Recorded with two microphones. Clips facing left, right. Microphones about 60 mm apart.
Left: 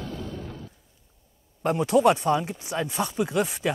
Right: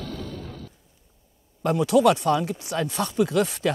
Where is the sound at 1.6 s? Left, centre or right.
Left.